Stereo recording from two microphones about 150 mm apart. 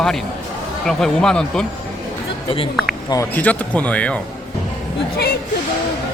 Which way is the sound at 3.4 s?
10° left (ahead or behind).